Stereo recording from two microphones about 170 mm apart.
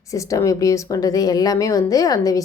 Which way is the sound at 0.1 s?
20° left (ahead or behind).